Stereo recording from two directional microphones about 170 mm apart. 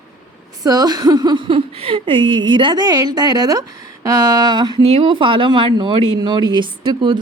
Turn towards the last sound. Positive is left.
turn(degrees=-25)  # may be behind; listen again after turning